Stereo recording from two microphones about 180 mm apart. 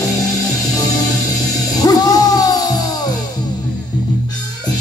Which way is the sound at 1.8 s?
20° left (ahead or behind).